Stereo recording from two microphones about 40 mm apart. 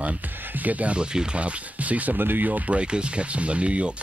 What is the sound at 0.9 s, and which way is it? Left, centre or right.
Speech, right.